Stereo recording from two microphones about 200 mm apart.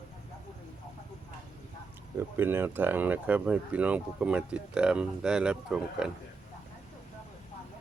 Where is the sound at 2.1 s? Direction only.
10° right (ahead or behind).